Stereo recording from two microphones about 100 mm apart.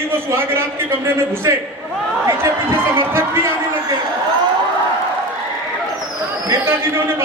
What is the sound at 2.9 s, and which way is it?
Speech, 25° right (ahead or behind).